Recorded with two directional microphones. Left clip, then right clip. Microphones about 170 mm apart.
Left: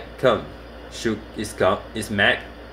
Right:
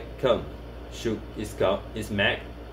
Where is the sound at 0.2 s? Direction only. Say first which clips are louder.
Left 5 dB; 45° left (ahead or behind).